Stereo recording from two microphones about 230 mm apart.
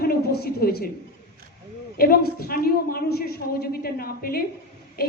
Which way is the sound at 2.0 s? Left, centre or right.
Left.